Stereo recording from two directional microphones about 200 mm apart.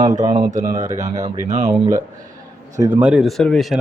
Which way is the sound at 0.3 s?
35° right (ahead or behind).